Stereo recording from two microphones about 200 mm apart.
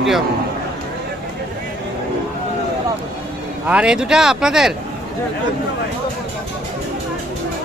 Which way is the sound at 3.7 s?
5° right (ahead or behind).